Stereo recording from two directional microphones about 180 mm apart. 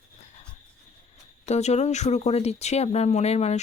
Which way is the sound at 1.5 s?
40° left (ahead or behind).